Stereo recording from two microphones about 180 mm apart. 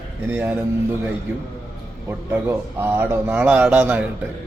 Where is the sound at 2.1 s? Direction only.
15° right (ahead or behind).